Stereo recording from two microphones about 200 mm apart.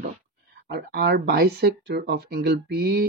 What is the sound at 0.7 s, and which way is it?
Speech, 55° right (ahead or behind).